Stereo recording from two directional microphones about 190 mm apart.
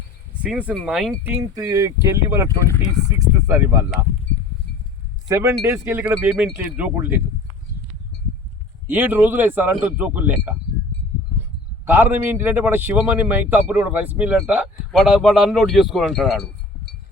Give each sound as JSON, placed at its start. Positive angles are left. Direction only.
{"t": 0.4, "sound": "a man's voice", "side_deg": -10}
{"t": 2.5, "sound": "speech", "side_deg": 15}
{"t": 3.1, "sound": "a man's voice", "side_deg": -15}
{"t": 5.3, "sound": "a man's voice", "side_deg": -15}
{"t": 8.9, "sound": "a man's voice", "side_deg": -10}
{"t": 11.9, "sound": "a man's voice", "side_deg": -10}